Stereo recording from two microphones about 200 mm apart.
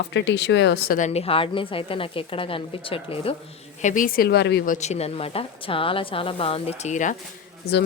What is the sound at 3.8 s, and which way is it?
A woman's voice, 40° left (ahead or behind).